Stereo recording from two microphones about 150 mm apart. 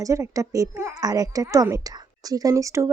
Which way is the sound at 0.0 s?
20° right (ahead or behind).